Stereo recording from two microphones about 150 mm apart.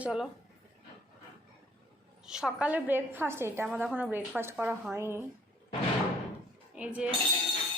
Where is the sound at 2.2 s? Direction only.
5° right (ahead or behind).